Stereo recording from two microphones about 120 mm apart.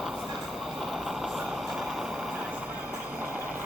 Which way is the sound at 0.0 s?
Centre (ahead or behind).